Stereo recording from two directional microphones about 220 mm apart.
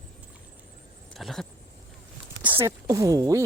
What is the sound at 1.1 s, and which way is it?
Speech, centre (ahead or behind).